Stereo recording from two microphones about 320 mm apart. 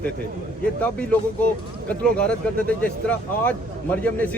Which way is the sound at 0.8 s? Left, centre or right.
Centre.